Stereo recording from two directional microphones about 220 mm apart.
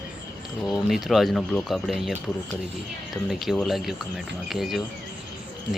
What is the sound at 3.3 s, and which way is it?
Speech, centre (ahead or behind).